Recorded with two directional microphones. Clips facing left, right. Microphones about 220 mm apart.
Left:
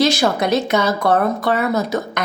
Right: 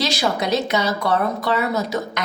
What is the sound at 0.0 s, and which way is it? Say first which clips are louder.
Speech: left 5 dB; 50° left (ahead or behind).